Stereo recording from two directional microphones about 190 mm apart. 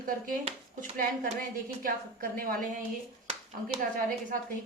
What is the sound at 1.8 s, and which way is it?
Speech, 50° right (ahead or behind).